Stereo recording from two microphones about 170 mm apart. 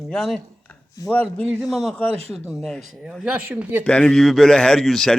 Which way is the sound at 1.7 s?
Centre (ahead or behind).